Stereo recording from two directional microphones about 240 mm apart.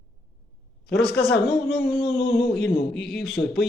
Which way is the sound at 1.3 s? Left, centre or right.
Centre.